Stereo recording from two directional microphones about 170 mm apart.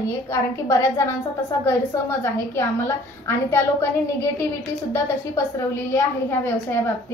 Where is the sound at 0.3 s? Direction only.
15° left (ahead or behind).